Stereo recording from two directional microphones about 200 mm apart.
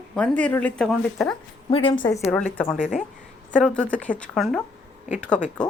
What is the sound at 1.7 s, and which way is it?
Speech, 25° left (ahead or behind).